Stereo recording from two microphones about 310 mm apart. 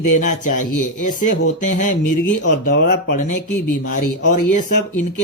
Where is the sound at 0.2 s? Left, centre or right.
Left.